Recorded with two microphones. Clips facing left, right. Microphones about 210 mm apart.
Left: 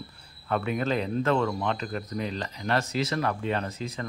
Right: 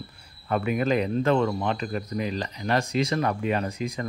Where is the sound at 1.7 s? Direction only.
10° right (ahead or behind).